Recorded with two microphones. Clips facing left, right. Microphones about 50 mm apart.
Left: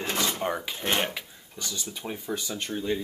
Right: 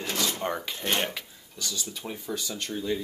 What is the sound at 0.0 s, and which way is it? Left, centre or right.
Dishes, left.